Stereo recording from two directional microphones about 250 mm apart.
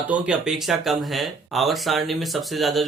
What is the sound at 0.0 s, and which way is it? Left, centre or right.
Speech, centre.